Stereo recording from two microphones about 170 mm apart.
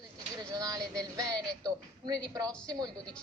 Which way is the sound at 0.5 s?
20° right (ahead or behind).